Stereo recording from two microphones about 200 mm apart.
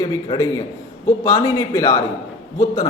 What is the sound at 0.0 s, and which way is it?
A man's voice, 15° left (ahead or behind).